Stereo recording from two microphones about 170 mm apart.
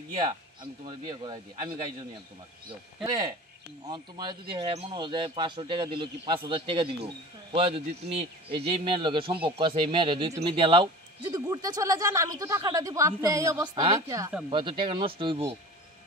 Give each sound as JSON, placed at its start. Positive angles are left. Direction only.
{"t": 0.3, "sound": "speech", "side_deg": -30}
{"t": 3.9, "sound": "a man's voice", "side_deg": -25}